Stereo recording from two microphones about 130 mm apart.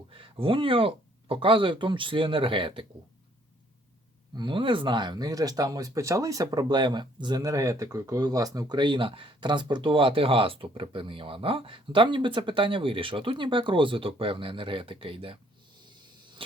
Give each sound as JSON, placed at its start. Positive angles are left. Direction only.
{"t": 0.1, "sound": "speech", "side_deg": -45}
{"t": 4.4, "sound": "speech", "side_deg": -40}